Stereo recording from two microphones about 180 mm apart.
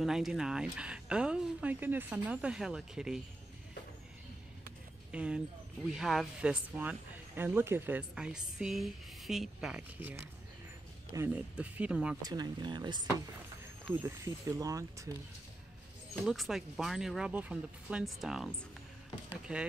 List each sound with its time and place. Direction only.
0.0 s speech: centre (ahead or behind)
5.1 s speech: 5° right (ahead or behind)
12.2 s speech: 20° right (ahead or behind)
16.3 s speech: centre (ahead or behind)